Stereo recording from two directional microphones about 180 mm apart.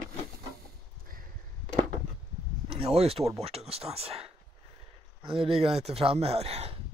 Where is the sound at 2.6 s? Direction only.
35° right (ahead or behind).